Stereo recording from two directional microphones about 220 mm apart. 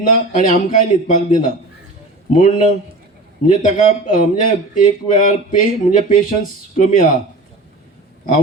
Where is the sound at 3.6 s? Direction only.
35° left (ahead or behind).